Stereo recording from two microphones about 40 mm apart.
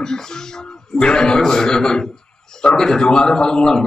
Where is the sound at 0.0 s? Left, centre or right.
Centre.